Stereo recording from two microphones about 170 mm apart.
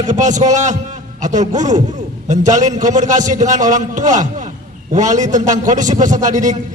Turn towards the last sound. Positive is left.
turn(degrees=-45)  # may be behind; listen again after turning